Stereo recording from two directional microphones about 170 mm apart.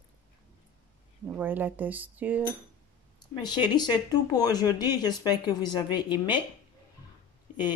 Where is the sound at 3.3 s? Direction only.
25° left (ahead or behind).